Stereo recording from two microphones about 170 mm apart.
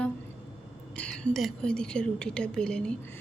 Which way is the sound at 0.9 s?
5° left (ahead or behind).